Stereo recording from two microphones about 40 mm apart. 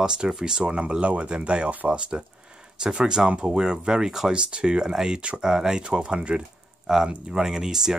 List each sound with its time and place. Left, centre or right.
0.3 s speech: centre